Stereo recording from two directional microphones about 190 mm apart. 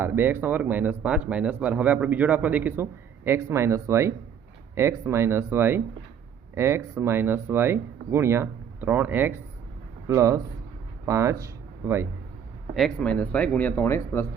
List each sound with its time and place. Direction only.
0.0 s speech: 10° right (ahead or behind)
12.7 s speech: 5° left (ahead or behind)